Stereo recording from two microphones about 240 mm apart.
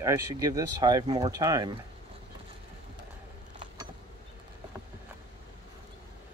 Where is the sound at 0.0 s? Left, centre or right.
Centre.